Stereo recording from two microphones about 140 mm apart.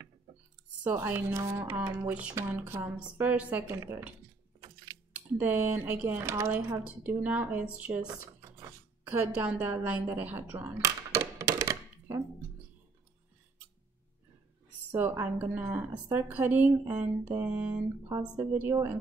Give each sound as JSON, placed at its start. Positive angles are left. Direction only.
{"t": 0.8, "sound": "speech", "side_deg": -15}
{"t": 5.4, "sound": "speech", "side_deg": -15}
{"t": 8.4, "sound": "speech", "side_deg": -20}
{"t": 10.8, "sound": "a sound", "side_deg": -25}
{"t": 14.9, "sound": "speech", "side_deg": -15}